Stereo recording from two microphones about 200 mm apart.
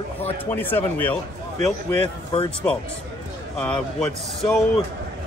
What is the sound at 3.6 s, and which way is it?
A man's voice, 5° left (ahead or behind).